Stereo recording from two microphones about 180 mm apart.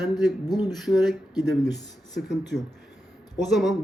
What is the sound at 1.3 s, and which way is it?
Speech, 20° left (ahead or behind).